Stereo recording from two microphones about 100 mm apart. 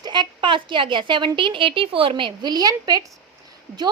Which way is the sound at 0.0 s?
50° right (ahead or behind).